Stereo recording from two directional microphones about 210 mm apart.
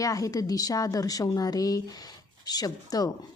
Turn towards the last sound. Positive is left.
turn(degrees=20)  # may be behind; listen again after turning